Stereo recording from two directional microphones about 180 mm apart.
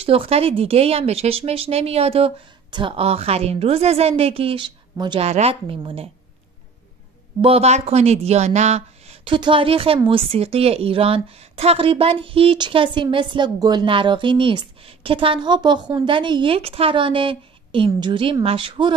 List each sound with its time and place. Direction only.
0.0 s speech: 30° right (ahead or behind)
5.2 s speech: 35° right (ahead or behind)
7.4 s speech: 35° right (ahead or behind)